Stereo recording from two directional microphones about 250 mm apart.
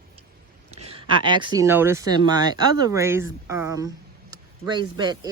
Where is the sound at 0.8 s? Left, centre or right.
Right.